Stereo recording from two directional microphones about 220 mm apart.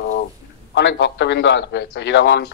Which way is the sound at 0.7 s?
50° left (ahead or behind).